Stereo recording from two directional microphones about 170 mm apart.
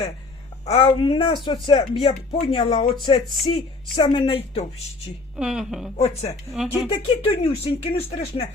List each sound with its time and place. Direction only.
0.6 s speech: 35° left (ahead or behind)
5.4 s speech: 5° right (ahead or behind)
6.0 s speech: 35° left (ahead or behind)
6.5 s speech: centre (ahead or behind)
6.8 s speech: 35° left (ahead or behind)